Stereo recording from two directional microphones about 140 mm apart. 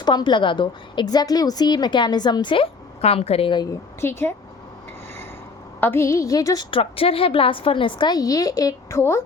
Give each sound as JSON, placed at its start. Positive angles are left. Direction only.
{"t": 0.0, "sound": "a woman's voice", "side_deg": 30}
{"t": 5.8, "sound": "a woman's voice", "side_deg": 15}
{"t": 6.7, "sound": "a woman's voice", "side_deg": 40}